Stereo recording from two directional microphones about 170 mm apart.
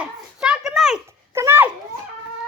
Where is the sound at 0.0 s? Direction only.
5° right (ahead or behind).